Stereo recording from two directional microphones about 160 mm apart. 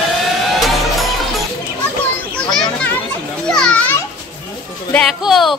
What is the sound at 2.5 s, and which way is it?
Children playing, 5° left (ahead or behind).